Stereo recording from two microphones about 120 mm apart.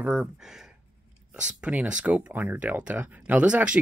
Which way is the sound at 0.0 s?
10° right (ahead or behind).